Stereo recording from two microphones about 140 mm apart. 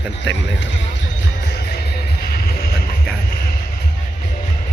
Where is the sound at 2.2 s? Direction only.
90° left.